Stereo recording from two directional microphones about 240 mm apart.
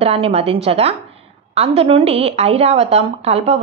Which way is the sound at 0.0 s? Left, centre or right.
Right.